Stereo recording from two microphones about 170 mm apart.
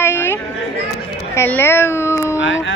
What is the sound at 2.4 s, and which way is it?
Speech, 90° left.